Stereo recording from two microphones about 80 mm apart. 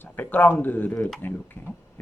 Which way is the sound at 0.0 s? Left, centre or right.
Left.